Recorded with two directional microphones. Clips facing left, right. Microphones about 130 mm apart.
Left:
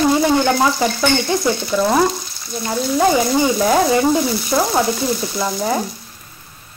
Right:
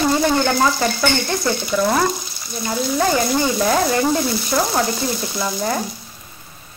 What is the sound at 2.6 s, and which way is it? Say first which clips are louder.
Speech: left 3 dB; 5° left (ahead or behind).